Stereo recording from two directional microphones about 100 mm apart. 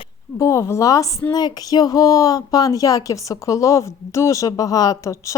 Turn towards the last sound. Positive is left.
turn(degrees=30)  # may be behind; listen again after turning